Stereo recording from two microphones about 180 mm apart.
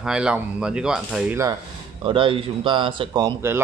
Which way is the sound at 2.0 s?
30° right (ahead or behind).